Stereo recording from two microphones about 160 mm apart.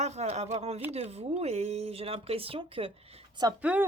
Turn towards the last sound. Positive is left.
turn(degrees=-10)  # may be behind; listen again after turning